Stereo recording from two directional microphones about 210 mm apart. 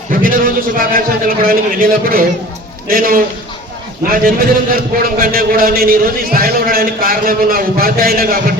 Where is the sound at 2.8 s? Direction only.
45° right (ahead or behind).